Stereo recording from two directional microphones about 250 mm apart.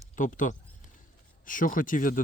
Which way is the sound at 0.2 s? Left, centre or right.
Left.